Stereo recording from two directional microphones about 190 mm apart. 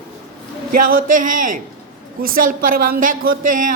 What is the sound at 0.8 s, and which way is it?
Speech, 45° right (ahead or behind).